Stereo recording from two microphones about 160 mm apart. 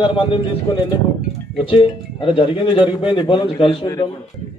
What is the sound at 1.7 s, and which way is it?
A man's voice, 30° left (ahead or behind).